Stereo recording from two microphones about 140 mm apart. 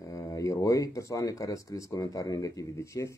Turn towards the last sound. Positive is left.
turn(degrees=20)  # may be behind; listen again after turning